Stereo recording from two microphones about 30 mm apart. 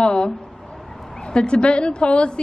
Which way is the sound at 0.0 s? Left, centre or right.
Left.